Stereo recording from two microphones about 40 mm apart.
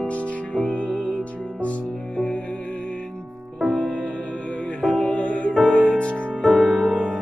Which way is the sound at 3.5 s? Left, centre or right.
Centre.